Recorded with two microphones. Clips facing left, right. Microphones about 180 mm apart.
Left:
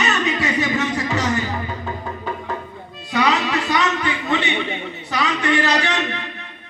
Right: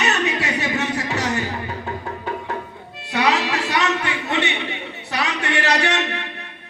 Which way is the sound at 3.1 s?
65° right (ahead or behind).